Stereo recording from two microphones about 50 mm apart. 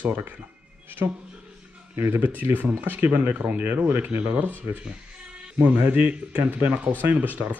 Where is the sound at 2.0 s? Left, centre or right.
Right.